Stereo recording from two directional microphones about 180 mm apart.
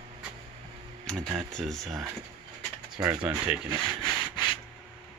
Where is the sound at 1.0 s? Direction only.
Centre (ahead or behind).